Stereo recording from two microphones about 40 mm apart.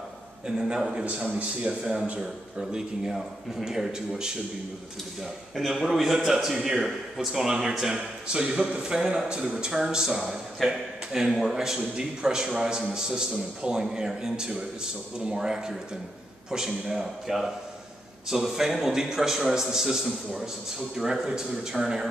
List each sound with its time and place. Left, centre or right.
0.5 s a man's voice: centre
1.0 s a man's voice: right
3.1 s a man's voice: centre
5.9 s a man's voice: centre
18.3 s a man's voice: centre